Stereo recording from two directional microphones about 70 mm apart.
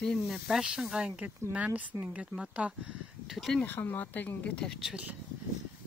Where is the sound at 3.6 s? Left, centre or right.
Left.